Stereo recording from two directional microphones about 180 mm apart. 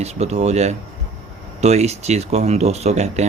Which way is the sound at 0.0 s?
35° right (ahead or behind).